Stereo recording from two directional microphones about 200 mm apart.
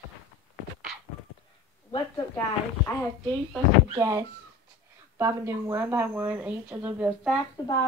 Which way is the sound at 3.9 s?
15° right (ahead or behind).